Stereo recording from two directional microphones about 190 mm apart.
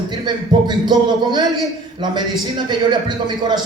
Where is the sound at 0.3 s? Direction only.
25° right (ahead or behind).